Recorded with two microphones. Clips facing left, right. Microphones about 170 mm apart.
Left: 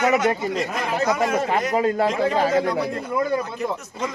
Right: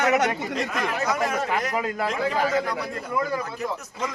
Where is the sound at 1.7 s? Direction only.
30° left (ahead or behind).